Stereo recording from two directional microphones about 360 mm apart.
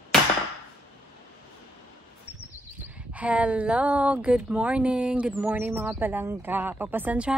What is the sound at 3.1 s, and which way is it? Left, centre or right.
A woman's voice, centre.